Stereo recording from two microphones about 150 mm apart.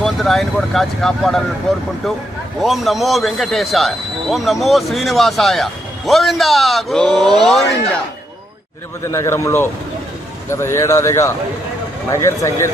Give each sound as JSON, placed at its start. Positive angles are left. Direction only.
{"t": 0.0, "sound": "speech", "side_deg": 0}
{"t": 2.6, "sound": "speech", "side_deg": 0}
{"t": 9.1, "sound": "a man's voice", "side_deg": 20}